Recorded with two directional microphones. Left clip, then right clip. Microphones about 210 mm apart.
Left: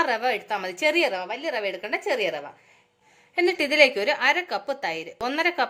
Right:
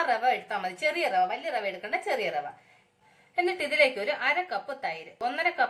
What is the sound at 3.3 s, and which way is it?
A woman's voice, 50° left (ahead or behind).